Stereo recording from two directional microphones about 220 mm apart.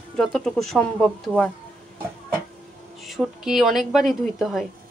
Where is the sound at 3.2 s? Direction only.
Centre (ahead or behind).